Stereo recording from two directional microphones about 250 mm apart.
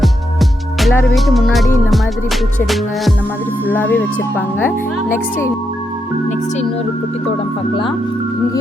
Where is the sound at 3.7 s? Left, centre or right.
Centre.